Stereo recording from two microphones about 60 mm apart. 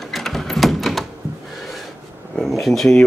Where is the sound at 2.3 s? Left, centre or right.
Centre.